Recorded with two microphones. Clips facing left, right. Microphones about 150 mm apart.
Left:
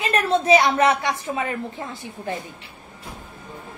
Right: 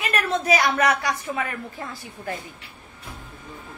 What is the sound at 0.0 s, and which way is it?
A woman's voice, 30° left (ahead or behind).